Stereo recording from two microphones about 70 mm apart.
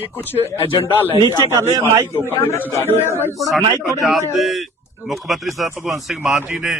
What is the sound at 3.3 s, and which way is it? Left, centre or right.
A man's voice, centre.